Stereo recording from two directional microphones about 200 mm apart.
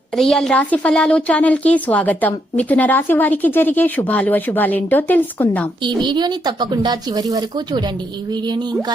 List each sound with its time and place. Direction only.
0.2 s speech: centre (ahead or behind)
6.0 s speech: 20° right (ahead or behind)